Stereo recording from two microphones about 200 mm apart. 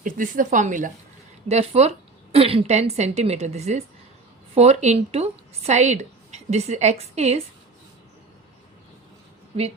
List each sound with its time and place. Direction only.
0.0 s a woman's voice: 40° right (ahead or behind)